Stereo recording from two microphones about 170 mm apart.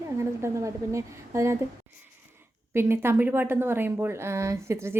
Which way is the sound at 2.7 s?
15° right (ahead or behind).